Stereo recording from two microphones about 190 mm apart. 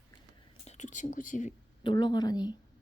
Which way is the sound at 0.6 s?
35° left (ahead or behind).